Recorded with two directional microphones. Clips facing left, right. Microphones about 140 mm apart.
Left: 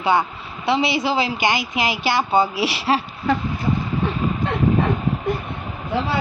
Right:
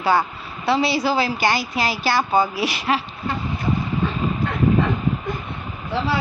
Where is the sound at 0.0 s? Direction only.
20° left (ahead or behind).